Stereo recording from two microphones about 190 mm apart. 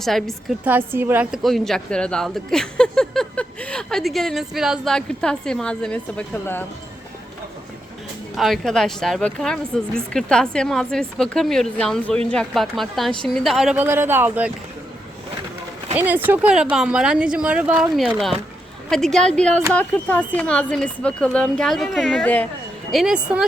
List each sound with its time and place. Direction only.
0.0 s a woman's voice: centre (ahead or behind)
0.7 s a woman's voice: 10° right (ahead or behind); by 6.7 s 10° left (ahead or behind)
8.4 s a woman's voice: centre (ahead or behind)
16.0 s a woman's voice: 10° right (ahead or behind)